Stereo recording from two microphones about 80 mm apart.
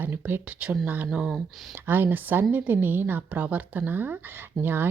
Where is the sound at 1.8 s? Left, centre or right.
Right.